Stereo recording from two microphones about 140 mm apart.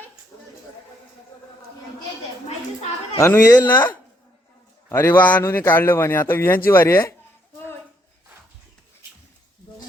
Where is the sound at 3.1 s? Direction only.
20° left (ahead or behind).